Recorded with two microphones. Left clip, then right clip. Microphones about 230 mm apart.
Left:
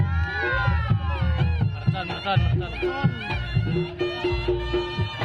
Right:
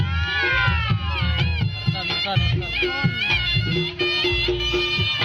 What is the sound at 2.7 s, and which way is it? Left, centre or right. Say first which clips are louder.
Speech: right 4 dB; left.